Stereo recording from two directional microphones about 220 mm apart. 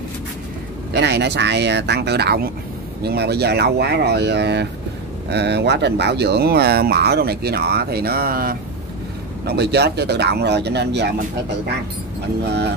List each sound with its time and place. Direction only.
0.9 s speech: 50° right (ahead or behind)
12.4 s speech: 50° right (ahead or behind)